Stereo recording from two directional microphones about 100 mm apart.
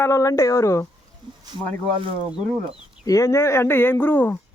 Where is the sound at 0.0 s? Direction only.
35° left (ahead or behind).